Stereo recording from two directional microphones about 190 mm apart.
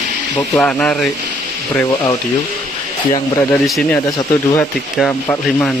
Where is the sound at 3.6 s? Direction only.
Centre (ahead or behind).